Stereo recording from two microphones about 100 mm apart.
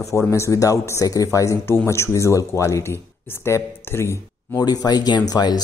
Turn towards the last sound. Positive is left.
turn(degrees=45)  # may be behind; listen again after turning